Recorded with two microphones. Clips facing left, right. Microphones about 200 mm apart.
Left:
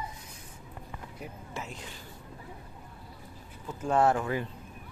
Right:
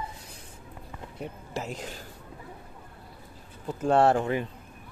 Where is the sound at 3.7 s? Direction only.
30° right (ahead or behind).